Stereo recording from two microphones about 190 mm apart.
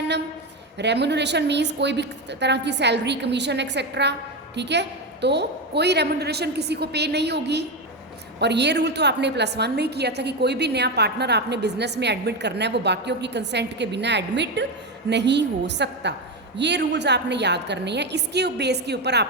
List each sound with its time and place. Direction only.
0.8 s a woman's voice: 65° right (ahead or behind)